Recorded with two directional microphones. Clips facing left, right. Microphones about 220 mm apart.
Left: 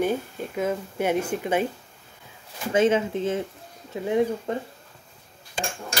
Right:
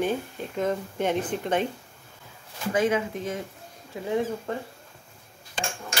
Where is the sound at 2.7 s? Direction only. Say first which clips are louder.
Left 4 dB; 25° left (ahead or behind).